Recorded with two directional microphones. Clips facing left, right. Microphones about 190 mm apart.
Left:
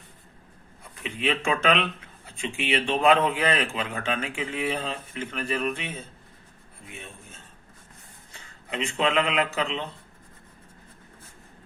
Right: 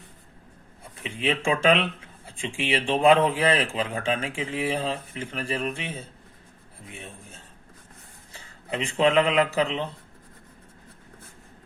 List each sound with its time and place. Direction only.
1.0 s a man's voice: 30° right (ahead or behind)
8.7 s a man's voice: 35° right (ahead or behind)